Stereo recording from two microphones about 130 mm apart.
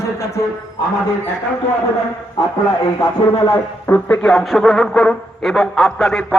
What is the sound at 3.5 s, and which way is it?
Speech, 15° left (ahead or behind).